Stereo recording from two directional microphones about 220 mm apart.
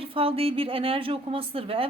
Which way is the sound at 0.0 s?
25° right (ahead or behind).